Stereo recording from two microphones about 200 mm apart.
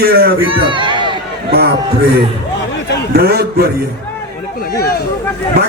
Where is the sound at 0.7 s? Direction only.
25° right (ahead or behind).